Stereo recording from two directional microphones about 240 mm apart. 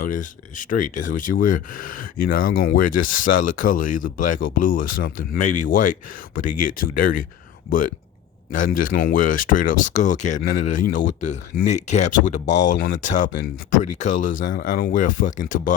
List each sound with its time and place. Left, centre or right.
0.0 s speech: left